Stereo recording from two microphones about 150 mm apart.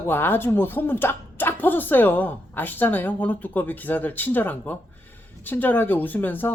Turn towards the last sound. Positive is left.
turn(degrees=15)  # may be behind; listen again after turning